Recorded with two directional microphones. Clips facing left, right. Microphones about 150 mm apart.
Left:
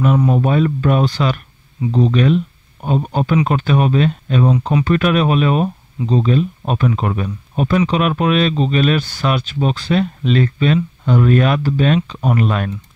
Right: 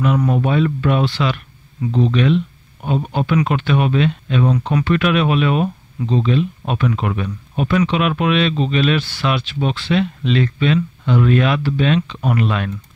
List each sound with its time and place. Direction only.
0.3 s speech: 40° left (ahead or behind)